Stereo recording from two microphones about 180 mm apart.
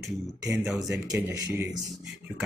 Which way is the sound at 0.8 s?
20° right (ahead or behind).